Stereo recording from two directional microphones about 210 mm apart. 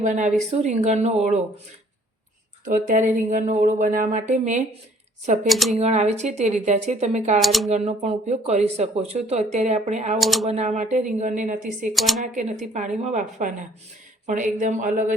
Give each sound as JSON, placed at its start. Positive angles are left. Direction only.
{"t": 0.0, "sound": "speech", "side_deg": -35}
{"t": 2.6, "sound": "speech", "side_deg": -40}
{"t": 5.5, "sound": "speech", "side_deg": 0}
{"t": 5.7, "sound": "speech", "side_deg": -30}
{"t": 7.3, "sound": "speech", "side_deg": 0}
{"t": 7.7, "sound": "speech", "side_deg": -30}
{"t": 10.2, "sound": "speech", "side_deg": 0}
{"t": 10.4, "sound": "speech", "side_deg": -30}
{"t": 11.9, "sound": "speech", "side_deg": 0}
{"t": 12.2, "sound": "speech", "side_deg": -35}